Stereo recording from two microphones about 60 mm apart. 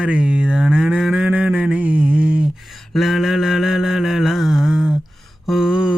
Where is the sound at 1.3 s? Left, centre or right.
Right.